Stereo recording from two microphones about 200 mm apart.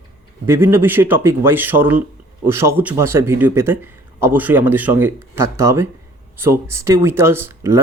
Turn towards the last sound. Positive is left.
turn(degrees=-10)  # may be behind; listen again after turning